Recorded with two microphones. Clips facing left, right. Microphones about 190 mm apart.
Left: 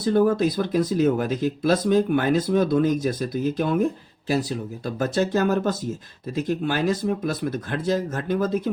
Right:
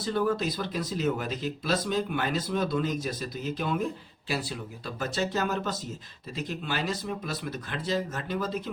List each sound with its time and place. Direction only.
0.0 s speech: 45° left (ahead or behind)